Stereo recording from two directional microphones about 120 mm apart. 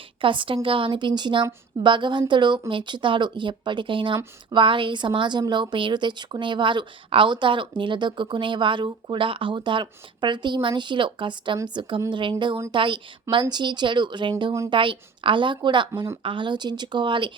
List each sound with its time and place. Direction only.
0.2 s a woman's voice: 45° right (ahead or behind)